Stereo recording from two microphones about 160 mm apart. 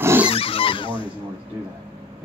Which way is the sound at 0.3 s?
35° left (ahead or behind).